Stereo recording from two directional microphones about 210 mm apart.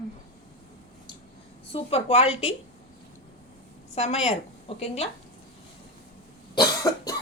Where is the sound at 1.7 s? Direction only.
30° left (ahead or behind).